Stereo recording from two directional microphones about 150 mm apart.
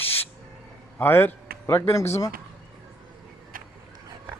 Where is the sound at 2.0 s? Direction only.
45° left (ahead or behind).